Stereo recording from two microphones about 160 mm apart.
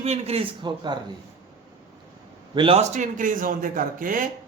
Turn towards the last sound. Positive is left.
turn(degrees=-60)  # may be behind; listen again after turning